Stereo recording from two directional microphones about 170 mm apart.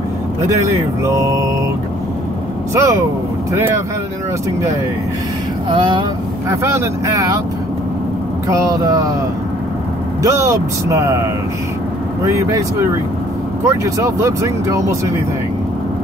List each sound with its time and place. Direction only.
1.0 s speech: 20° right (ahead or behind)
2.7 s speech: 15° right (ahead or behind)
5.7 s speech: 30° right (ahead or behind)
6.5 s speech: 15° right (ahead or behind)
8.5 s speech: 20° right (ahead or behind)
10.2 s speech: 20° right (ahead or behind)
12.3 s speech: 20° right (ahead or behind)